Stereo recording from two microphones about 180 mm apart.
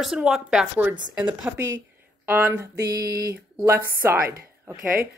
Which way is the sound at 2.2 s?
10° right (ahead or behind).